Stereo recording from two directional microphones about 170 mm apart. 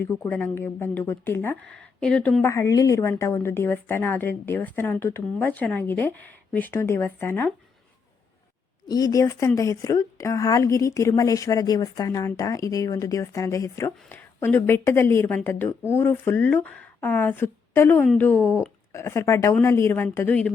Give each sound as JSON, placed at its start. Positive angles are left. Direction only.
{"t": 0.2, "sound": "a woman's voice", "side_deg": 10}
{"t": 8.9, "sound": "a woman's voice", "side_deg": 20}